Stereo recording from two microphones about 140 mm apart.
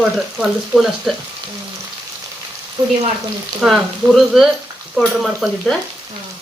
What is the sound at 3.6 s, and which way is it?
Speech, 5° right (ahead or behind).